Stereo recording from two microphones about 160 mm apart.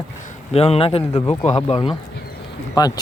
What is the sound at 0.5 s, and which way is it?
Speech, 40° left (ahead or behind).